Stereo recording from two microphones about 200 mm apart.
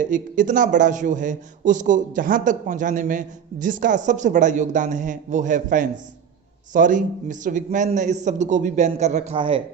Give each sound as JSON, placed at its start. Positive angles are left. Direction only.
{"t": 0.0, "sound": "speech", "side_deg": -40}